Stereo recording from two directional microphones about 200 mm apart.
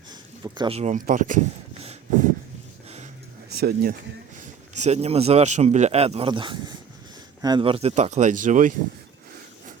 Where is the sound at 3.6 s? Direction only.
50° right (ahead or behind).